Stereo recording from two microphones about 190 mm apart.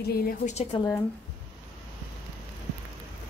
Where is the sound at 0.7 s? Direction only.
25° left (ahead or behind).